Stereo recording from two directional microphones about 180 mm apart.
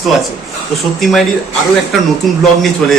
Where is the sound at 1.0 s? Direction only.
Centre (ahead or behind).